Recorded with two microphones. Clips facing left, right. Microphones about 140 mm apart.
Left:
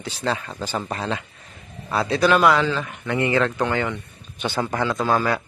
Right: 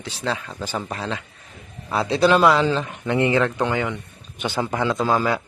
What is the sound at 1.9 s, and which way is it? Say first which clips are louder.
A man's voice: right 1 dB; 20° right (ahead or behind).